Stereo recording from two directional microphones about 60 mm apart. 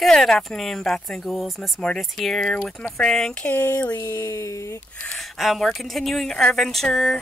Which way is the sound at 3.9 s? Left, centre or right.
Left.